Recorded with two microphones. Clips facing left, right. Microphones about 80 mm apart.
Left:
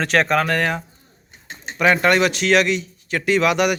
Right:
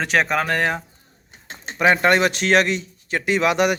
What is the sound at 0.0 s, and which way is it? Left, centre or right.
Speech, centre.